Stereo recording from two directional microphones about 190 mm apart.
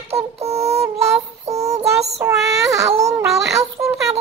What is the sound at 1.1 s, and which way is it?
Child singing, 35° right (ahead or behind).